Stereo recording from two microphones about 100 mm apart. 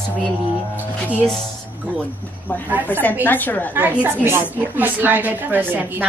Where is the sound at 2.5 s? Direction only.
20° left (ahead or behind).